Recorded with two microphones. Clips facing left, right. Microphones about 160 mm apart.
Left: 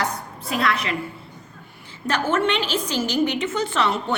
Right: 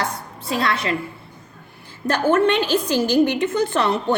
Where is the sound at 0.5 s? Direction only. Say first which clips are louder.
Right 2 dB; 30° right (ahead or behind).